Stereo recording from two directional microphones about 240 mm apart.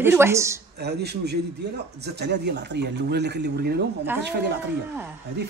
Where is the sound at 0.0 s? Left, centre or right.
Centre.